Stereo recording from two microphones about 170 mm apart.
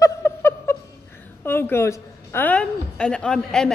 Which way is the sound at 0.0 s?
15° left (ahead or behind).